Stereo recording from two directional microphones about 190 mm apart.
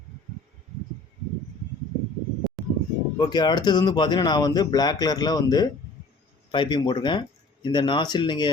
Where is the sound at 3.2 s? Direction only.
20° left (ahead or behind).